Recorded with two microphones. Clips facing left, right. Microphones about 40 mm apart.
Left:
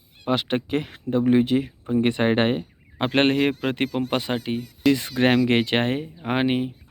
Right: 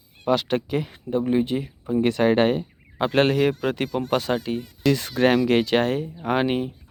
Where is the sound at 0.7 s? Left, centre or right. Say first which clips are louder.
Left 1 dB; left.